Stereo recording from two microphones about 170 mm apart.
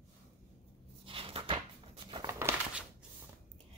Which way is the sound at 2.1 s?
20° right (ahead or behind).